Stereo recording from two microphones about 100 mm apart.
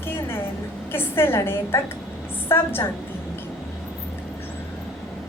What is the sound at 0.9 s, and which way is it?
A woman's voice, 25° left (ahead or behind).